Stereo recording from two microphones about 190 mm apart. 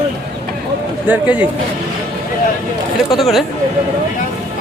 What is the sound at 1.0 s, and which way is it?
Speech, 10° right (ahead or behind).